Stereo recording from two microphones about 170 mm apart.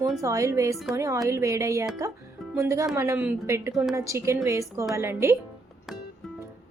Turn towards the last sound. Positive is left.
turn(degrees=-15)  # may be behind; listen again after turning